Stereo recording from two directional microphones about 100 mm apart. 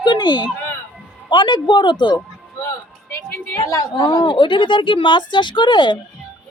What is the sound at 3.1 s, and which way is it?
Speech, 30° left (ahead or behind).